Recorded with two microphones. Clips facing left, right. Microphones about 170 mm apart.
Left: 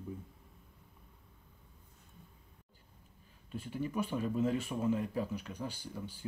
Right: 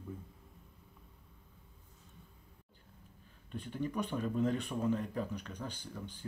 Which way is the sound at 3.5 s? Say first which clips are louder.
Left 1 dB; 5° left (ahead or behind).